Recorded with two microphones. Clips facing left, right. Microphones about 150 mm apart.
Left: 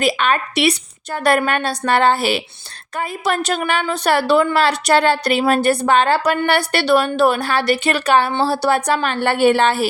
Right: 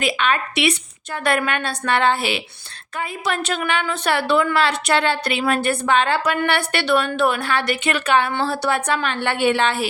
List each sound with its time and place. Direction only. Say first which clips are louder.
0.0 s a woman's voice: left 3 dB; 40° left (ahead or behind)